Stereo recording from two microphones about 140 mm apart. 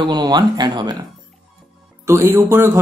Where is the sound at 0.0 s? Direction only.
30° right (ahead or behind).